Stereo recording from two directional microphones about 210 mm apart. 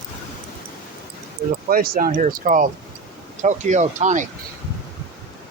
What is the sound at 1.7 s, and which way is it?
Speech, 45° right (ahead or behind).